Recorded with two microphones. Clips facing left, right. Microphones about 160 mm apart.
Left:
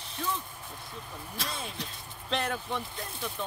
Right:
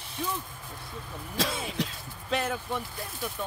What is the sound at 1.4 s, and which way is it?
Speech, 90° right.